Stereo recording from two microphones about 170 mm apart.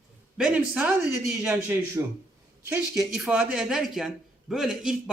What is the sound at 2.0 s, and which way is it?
A man's voice, 15° right (ahead or behind).